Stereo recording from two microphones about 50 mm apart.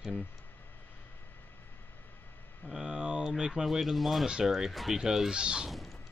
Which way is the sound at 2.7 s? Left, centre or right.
Centre.